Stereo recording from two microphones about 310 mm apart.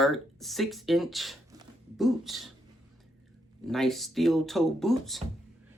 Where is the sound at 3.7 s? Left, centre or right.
Centre.